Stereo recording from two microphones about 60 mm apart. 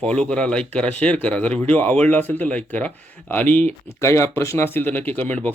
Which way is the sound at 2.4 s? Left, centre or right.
Left.